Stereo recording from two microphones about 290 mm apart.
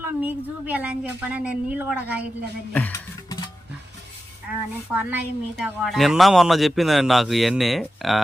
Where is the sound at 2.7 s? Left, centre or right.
Centre.